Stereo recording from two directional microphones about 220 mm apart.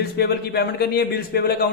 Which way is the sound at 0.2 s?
45° left (ahead or behind).